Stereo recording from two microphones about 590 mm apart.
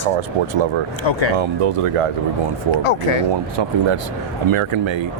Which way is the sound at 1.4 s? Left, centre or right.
Right.